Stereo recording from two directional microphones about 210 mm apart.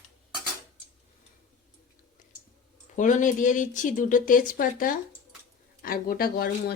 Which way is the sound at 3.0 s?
35° left (ahead or behind).